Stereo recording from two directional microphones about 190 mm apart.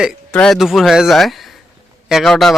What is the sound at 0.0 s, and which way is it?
A man's voice, centre (ahead or behind).